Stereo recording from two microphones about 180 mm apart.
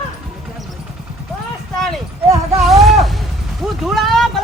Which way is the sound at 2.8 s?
Centre (ahead or behind).